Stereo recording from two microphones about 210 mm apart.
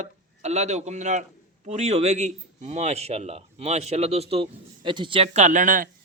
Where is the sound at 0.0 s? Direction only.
35° right (ahead or behind).